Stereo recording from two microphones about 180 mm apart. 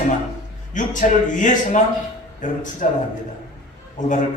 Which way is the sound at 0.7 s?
45° left (ahead or behind).